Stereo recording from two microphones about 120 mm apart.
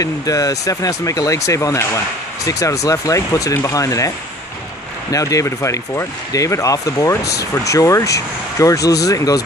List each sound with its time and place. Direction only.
0.0 s speech: 30° left (ahead or behind)
5.1 s speech: 25° left (ahead or behind)